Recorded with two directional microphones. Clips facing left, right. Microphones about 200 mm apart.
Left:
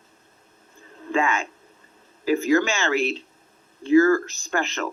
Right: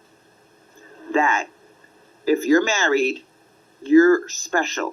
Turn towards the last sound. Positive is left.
turn(degrees=-40)  # may be behind; listen again after turning